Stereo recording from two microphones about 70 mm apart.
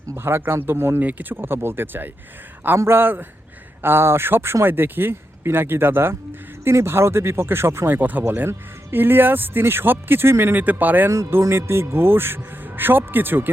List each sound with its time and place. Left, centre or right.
0.1 s speech: right
11.1 s speech: right